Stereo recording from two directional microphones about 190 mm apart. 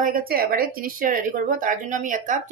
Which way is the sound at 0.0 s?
50° right (ahead or behind).